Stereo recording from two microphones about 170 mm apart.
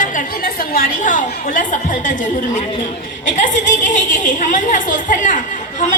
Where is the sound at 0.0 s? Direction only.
50° left (ahead or behind).